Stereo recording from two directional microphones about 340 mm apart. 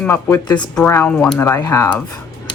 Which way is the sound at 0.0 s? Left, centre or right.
Centre.